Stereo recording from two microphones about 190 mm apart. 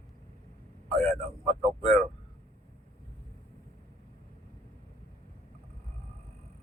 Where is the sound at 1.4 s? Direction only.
30° right (ahead or behind).